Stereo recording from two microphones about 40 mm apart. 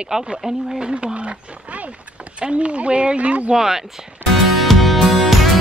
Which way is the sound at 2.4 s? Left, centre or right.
Right.